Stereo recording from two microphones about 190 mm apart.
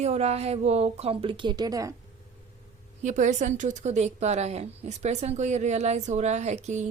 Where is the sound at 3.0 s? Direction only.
40° right (ahead or behind).